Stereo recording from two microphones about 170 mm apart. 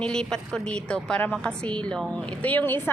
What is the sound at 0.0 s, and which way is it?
A woman's voice, 5° left (ahead or behind).